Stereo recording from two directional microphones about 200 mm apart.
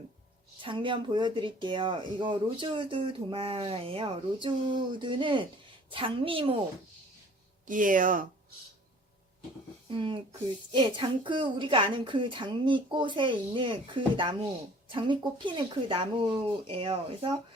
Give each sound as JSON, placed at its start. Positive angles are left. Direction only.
{"t": 0.6, "sound": "speech", "side_deg": -25}
{"t": 7.7, "sound": "speech", "side_deg": -40}
{"t": 9.9, "sound": "speech", "side_deg": -25}